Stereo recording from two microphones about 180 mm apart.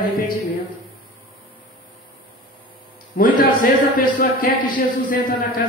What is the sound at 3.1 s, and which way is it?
A man's voice, 50° left (ahead or behind).